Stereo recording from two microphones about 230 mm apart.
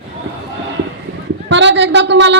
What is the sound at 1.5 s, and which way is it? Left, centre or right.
Speech, right.